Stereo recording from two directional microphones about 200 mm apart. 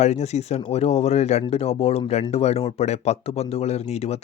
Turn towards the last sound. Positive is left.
turn(degrees=30)  # may be behind; listen again after turning